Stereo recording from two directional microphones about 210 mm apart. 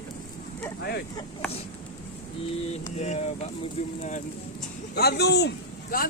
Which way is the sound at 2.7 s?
30° left (ahead or behind).